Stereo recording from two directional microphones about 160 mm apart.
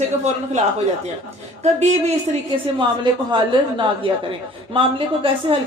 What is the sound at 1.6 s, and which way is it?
Speech, 45° right (ahead or behind).